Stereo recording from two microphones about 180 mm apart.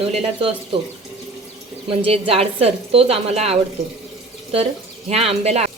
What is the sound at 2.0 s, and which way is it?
A woman's voice, 35° right (ahead or behind).